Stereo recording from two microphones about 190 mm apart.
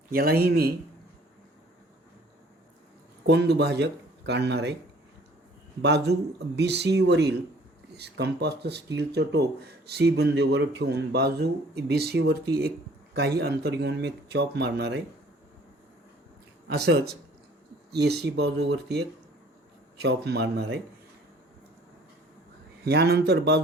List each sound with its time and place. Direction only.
0.1 s a man's voice: 50° right (ahead or behind)
3.2 s speech: 60° right (ahead or behind)
5.8 s speech: 65° right (ahead or behind)
16.6 s speech: 60° right (ahead or behind)
22.9 s speech: 60° right (ahead or behind)